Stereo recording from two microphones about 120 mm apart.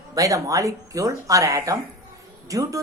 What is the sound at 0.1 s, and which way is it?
A woman's voice, 30° right (ahead or behind).